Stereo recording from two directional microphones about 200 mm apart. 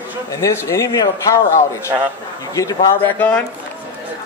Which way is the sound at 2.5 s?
15° left (ahead or behind).